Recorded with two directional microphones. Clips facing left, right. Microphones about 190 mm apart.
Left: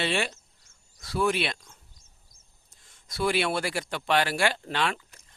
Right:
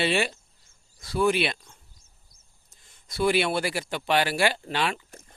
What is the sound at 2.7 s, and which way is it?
Speech, centre (ahead or behind).